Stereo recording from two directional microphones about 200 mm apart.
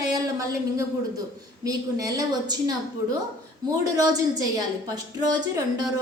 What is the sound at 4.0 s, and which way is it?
A woman's voice, 20° right (ahead or behind).